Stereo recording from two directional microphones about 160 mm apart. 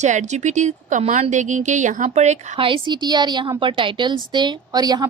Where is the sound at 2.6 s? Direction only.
30° right (ahead or behind).